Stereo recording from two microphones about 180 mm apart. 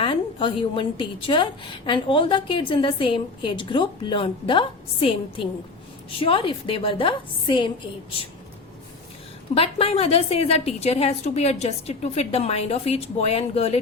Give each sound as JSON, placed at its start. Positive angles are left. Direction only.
{"t": 0.0, "sound": "a woman's voice", "side_deg": 30}
{"t": 9.6, "sound": "a woman's voice", "side_deg": 35}